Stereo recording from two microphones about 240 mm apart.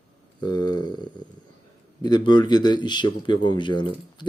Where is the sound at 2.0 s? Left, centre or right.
Centre.